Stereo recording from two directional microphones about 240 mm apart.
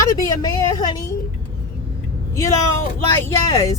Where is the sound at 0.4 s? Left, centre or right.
Centre.